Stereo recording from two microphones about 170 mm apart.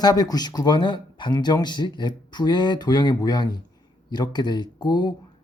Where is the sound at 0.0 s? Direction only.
20° left (ahead or behind).